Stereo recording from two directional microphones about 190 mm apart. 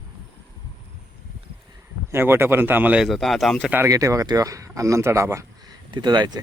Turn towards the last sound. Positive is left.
turn(degrees=-20)  # may be behind; listen again after turning